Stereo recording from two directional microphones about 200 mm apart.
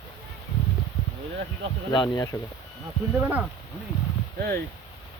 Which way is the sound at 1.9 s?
20° left (ahead or behind).